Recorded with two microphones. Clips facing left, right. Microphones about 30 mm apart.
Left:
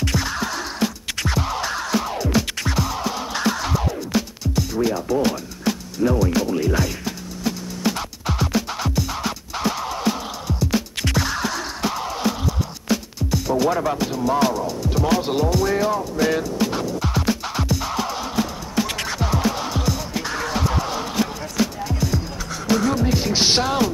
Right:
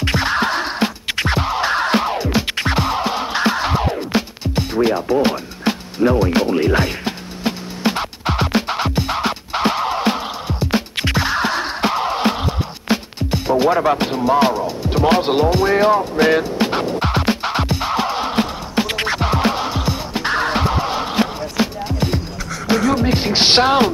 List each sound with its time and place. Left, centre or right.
0.0 s music: right
14.3 s speech: right
14.8 s music: right
19.6 s music: right